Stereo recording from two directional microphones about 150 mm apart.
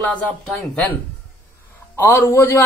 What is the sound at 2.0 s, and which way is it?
Speech, 15° left (ahead or behind).